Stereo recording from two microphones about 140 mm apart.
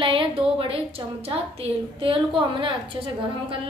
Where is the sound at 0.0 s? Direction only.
40° right (ahead or behind).